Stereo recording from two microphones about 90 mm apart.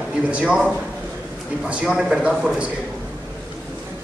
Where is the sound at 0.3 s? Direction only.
15° right (ahead or behind).